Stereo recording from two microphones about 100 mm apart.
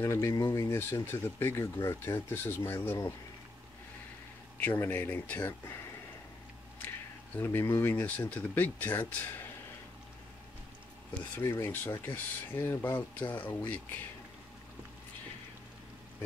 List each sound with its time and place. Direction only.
0.0 s speech: 30° left (ahead or behind)
4.6 s speech: 15° left (ahead or behind)
7.3 s speech: 20° left (ahead or behind)
11.3 s speech: 25° left (ahead or behind)